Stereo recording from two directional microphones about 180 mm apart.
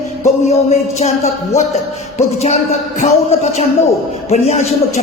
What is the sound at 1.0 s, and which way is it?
A man's voice, 40° left (ahead or behind).